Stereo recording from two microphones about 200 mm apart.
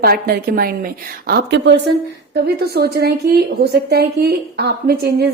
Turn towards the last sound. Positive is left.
turn(degrees=-55)  # may be behind; listen again after turning